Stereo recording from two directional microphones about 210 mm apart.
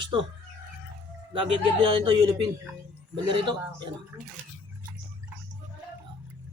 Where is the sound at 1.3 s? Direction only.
25° right (ahead or behind).